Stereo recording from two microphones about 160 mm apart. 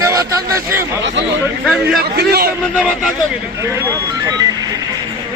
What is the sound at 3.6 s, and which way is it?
Speech, 20° right (ahead or behind).